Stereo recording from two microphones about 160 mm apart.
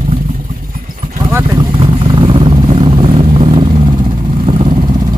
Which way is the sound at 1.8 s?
35° right (ahead or behind).